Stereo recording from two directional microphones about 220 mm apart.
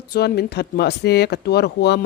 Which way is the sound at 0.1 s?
45° left (ahead or behind).